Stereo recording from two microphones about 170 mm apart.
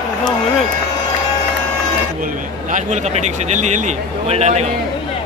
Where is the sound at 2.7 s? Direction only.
45° right (ahead or behind).